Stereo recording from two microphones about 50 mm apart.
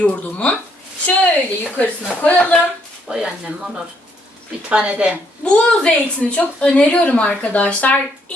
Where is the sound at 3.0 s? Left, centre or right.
Centre.